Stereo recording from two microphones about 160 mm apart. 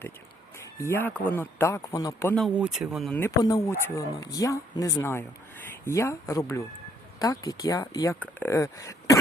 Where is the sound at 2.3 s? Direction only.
Centre (ahead or behind).